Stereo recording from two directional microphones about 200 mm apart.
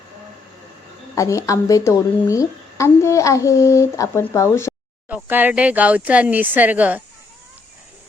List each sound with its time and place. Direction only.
1.1 s a woman's voice: 15° left (ahead or behind)
5.0 s speech: 10° right (ahead or behind)